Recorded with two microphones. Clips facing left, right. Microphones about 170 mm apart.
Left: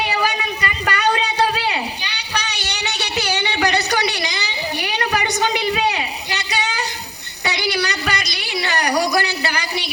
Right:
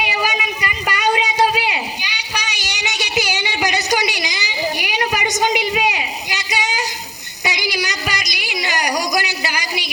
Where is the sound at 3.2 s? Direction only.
60° left (ahead or behind).